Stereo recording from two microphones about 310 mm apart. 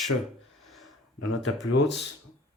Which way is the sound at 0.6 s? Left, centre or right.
Centre.